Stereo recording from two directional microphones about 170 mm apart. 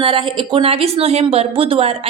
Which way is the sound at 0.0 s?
30° right (ahead or behind).